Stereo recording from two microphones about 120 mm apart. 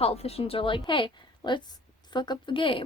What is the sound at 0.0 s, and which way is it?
A woman's voice, 55° left (ahead or behind).